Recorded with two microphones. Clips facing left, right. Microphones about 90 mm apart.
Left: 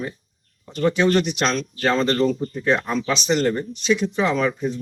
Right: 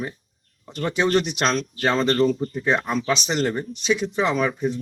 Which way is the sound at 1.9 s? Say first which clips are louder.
Even; 5° right (ahead or behind).